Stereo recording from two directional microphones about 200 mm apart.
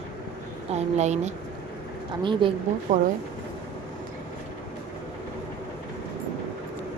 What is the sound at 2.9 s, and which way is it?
Speech, 40° right (ahead or behind).